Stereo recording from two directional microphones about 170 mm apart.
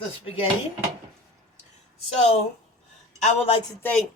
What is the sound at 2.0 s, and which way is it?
A woman's voice, 35° left (ahead or behind).